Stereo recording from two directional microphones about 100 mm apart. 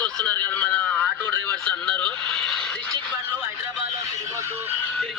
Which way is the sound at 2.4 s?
5° left (ahead or behind).